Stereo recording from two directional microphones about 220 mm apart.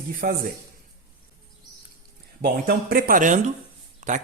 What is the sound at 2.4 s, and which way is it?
Speech, 45° right (ahead or behind).